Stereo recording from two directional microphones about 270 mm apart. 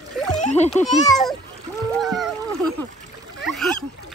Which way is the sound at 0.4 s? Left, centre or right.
Left.